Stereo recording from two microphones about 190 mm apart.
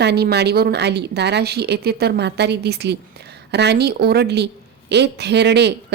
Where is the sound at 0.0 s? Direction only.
60° right (ahead or behind).